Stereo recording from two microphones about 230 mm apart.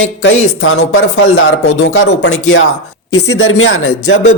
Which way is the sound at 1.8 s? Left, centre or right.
Left.